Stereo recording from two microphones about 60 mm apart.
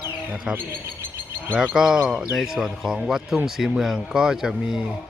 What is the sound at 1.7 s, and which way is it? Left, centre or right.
A man's voice, centre.